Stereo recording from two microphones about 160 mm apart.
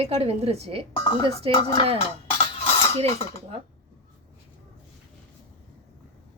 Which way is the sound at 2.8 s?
35° left (ahead or behind).